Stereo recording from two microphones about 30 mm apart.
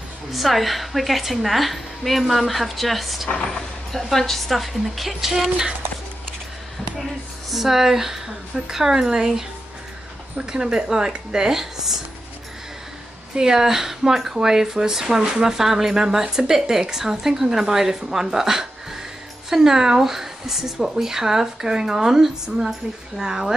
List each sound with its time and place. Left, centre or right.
0.3 s a woman's voice: centre
3.4 s a woman's voice: centre
7.5 s speech: centre; by 11.5 s right
11.5 s speech: centre
13.4 s speech: centre